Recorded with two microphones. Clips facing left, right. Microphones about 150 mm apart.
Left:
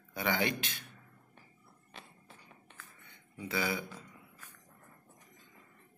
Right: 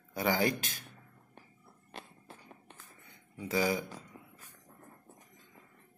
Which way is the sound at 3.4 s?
35° right (ahead or behind).